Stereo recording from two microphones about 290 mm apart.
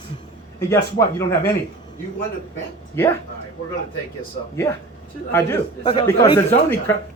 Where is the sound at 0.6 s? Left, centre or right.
Centre.